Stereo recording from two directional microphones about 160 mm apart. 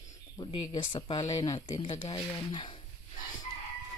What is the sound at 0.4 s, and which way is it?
Speech, 30° left (ahead or behind).